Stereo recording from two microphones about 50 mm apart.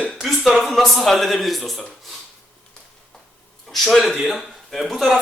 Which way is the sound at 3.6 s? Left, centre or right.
Centre.